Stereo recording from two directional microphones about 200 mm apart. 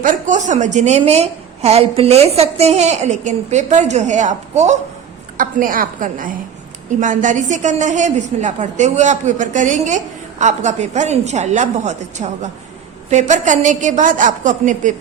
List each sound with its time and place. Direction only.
0.0 s a woman's voice: 40° right (ahead or behind)